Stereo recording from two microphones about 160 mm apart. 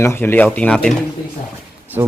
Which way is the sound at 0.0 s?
15° left (ahead or behind).